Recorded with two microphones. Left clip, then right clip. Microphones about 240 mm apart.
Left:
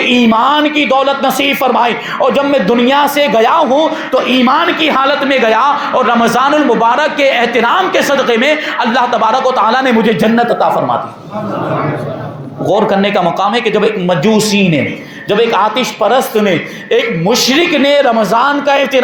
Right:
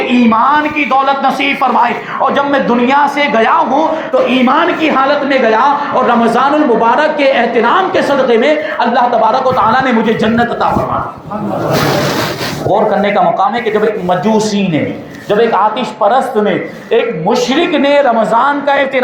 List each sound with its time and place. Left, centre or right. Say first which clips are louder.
0.1 s a man's voice: right 2 dB; left
12.7 s a man's voice: even; left